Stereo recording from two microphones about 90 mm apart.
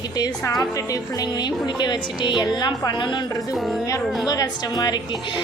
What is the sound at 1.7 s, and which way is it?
A woman's voice, 55° left (ahead or behind).